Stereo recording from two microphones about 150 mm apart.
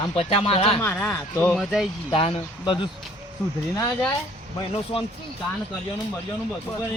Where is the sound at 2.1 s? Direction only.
35° left (ahead or behind).